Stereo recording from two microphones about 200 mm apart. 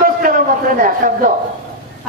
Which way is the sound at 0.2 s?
45° right (ahead or behind).